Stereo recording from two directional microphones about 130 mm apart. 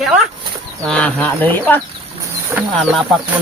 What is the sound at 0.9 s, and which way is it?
Speech, 10° left (ahead or behind).